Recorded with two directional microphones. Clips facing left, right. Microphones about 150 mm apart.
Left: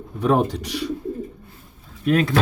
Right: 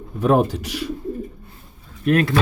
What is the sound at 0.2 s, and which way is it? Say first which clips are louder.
Speech: right 2 dB; 5° right (ahead or behind).